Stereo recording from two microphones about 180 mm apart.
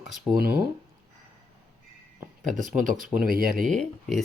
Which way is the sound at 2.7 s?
50° right (ahead or behind).